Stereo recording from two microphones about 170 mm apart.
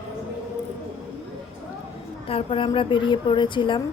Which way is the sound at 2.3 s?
30° left (ahead or behind).